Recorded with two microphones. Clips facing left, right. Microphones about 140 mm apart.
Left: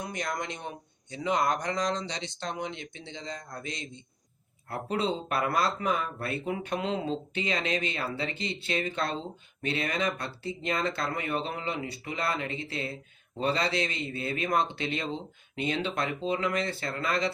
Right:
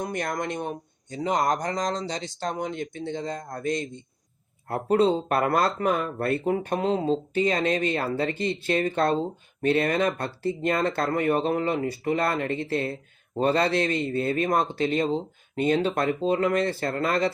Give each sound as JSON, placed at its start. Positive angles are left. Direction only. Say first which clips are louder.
{"t": 0.0, "sound": "speech", "louder": "right 5 dB", "side_deg": -50}